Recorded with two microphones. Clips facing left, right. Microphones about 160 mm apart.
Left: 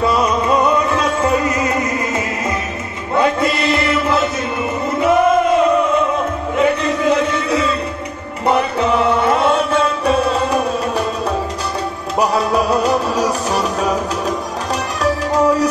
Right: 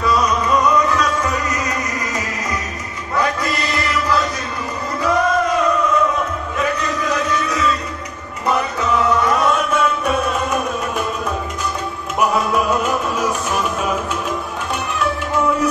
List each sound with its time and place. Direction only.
0.0 s music: 25° left (ahead or behind)
3.2 s chant: 25° left (ahead or behind)
4.9 s music: 25° left (ahead or behind)
15.0 s music: 35° left (ahead or behind)